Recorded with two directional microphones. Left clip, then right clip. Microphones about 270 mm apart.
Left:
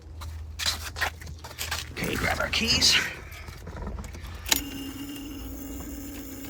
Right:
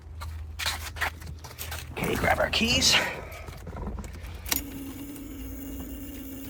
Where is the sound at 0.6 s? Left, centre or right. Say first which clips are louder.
Left 1 dB; centre.